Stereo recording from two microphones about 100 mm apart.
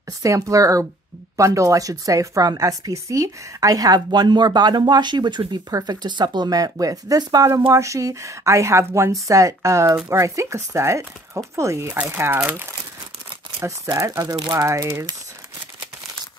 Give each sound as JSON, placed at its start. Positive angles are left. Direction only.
{"t": 0.2, "sound": "a woman's voice", "side_deg": -35}
{"t": 13.8, "sound": "a woman's voice", "side_deg": -35}
{"t": 14.3, "sound": "speech", "side_deg": -45}
{"t": 14.7, "sound": "speech", "side_deg": -30}